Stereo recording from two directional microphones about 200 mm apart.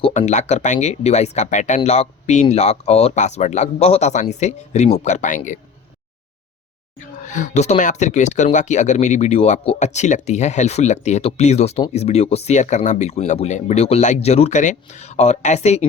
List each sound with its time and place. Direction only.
0.0 s speech: 35° left (ahead or behind)
7.3 s speech: 40° left (ahead or behind)